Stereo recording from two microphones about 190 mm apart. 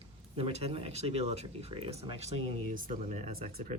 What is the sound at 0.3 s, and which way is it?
Speech, 30° right (ahead or behind).